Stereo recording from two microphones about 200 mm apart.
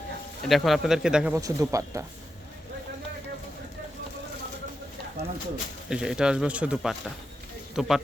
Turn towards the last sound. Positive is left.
turn(degrees=0)  # may be behind; listen again after turning